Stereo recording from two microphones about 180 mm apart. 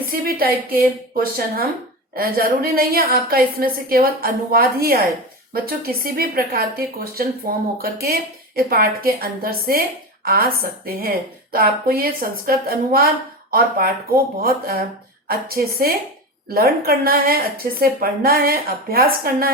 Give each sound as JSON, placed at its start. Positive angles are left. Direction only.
{"t": 0.1, "sound": "a woman's voice", "side_deg": -55}